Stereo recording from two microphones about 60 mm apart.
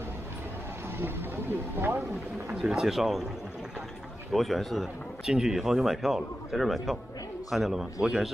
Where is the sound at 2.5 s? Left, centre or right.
Centre.